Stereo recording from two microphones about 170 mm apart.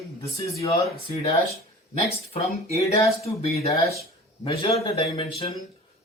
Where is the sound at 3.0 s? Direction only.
40° left (ahead or behind).